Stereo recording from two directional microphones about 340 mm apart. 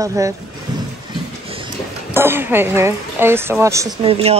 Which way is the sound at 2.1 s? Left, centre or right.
Centre.